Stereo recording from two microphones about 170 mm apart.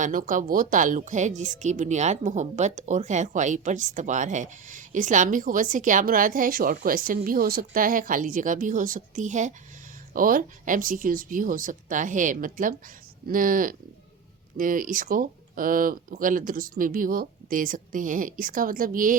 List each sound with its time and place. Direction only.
0.0 s a woman's voice: 50° right (ahead or behind)